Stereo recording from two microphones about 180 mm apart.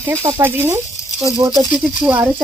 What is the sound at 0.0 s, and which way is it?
Speech, 15° right (ahead or behind).